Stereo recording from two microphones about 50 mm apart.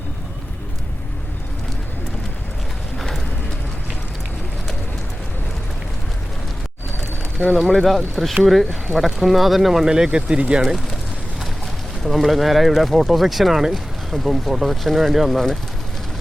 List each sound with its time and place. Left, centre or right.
7.3 s speech: centre
12.0 s speech: centre